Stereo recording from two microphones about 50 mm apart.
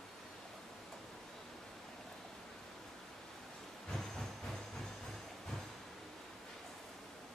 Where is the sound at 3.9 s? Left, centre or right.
Centre.